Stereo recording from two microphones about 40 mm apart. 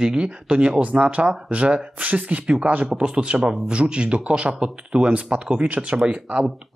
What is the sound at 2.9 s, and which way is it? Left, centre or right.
Speech, right.